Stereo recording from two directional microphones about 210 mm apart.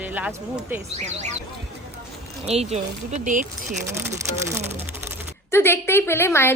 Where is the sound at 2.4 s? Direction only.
30° right (ahead or behind).